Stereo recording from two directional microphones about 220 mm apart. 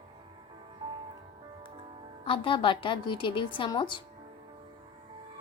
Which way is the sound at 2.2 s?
25° left (ahead or behind).